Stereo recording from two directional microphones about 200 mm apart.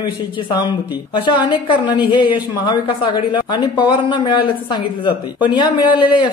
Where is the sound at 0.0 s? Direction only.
20° left (ahead or behind).